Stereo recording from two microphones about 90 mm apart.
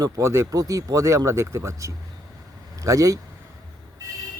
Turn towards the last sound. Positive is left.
turn(degrees=-40)  # may be behind; listen again after turning